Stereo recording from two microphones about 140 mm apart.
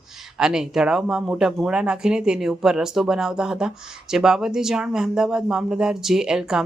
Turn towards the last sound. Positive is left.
turn(degrees=-5)  # may be behind; listen again after turning